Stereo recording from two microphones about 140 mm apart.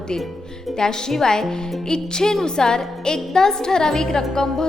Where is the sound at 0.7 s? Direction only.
5° left (ahead or behind).